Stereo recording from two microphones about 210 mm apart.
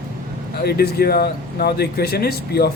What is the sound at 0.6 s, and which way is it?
Speech, 50° left (ahead or behind).